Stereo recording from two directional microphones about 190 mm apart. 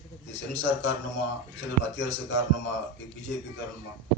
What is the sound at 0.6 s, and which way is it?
A man's voice, 70° left (ahead or behind).